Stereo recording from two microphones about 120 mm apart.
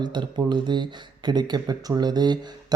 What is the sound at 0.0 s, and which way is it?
Speech, 40° right (ahead or behind).